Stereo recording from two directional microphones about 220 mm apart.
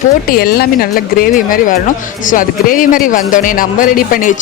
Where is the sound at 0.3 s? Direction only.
45° left (ahead or behind).